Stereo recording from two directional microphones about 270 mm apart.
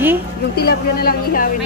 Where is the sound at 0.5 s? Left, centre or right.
Left.